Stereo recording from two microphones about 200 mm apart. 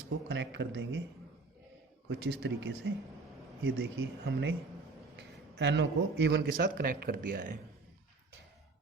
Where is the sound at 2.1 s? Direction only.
60° right (ahead or behind).